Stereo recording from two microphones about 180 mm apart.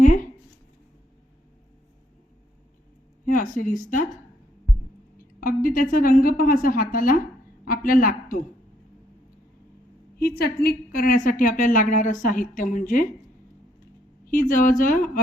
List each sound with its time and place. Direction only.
3.2 s speech: 45° left (ahead or behind)
5.1 s a woman's voice: 50° left (ahead or behind)
10.2 s a woman's voice: 60° left (ahead or behind)
14.3 s a woman's voice: 50° left (ahead or behind)